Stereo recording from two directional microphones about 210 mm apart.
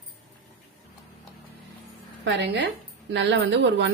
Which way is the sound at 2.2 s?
55° right (ahead or behind).